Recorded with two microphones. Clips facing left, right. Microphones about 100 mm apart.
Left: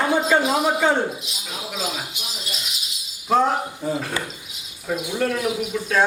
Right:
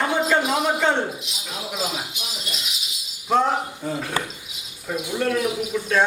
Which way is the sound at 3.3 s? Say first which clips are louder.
Left 1 dB; centre (ahead or behind).